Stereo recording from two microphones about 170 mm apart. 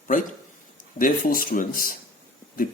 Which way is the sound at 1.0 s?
55° left (ahead or behind).